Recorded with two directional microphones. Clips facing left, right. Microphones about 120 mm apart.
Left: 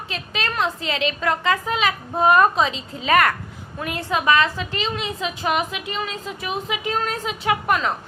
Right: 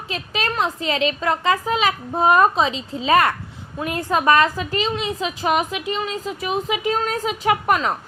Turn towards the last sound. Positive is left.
turn(degrees=-40)  # may be behind; listen again after turning